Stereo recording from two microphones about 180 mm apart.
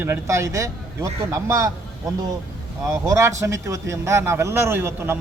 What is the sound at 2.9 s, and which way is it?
Speech, 15° right (ahead or behind).